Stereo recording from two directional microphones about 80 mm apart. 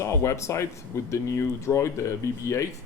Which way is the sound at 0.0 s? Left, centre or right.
Left.